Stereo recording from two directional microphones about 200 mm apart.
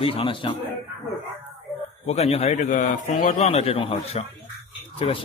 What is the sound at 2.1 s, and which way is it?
A man's voice, 30° left (ahead or behind).